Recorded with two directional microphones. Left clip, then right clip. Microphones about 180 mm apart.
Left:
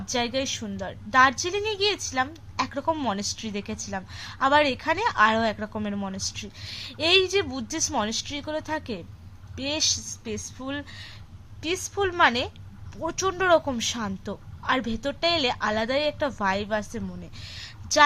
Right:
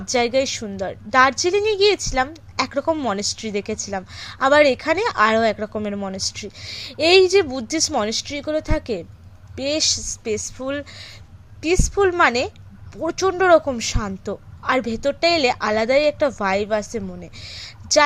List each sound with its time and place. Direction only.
0.0 s a woman's voice: 20° right (ahead or behind)